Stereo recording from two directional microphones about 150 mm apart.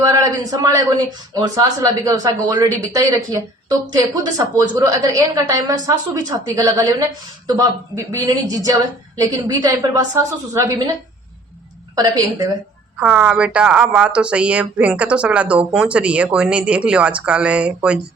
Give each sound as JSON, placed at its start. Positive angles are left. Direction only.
{"t": 0.0, "sound": "a man's voice", "side_deg": -25}
{"t": 11.9, "sound": "a man's voice", "side_deg": -25}
{"t": 13.0, "sound": "speech", "side_deg": -10}